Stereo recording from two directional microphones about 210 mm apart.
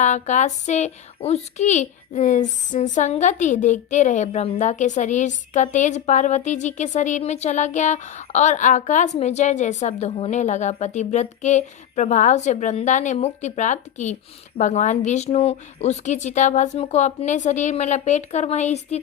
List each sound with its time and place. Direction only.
0.0 s speech: 35° left (ahead or behind)